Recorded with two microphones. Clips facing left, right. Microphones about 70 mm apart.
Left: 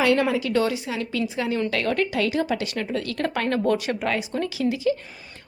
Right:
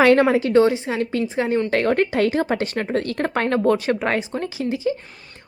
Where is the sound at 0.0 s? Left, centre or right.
Right.